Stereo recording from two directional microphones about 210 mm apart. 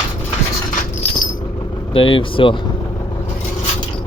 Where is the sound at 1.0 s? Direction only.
30° left (ahead or behind).